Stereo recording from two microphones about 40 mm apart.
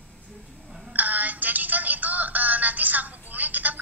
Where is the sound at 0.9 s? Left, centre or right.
Right.